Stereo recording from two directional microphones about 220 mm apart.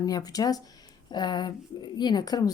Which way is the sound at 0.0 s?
15° left (ahead or behind).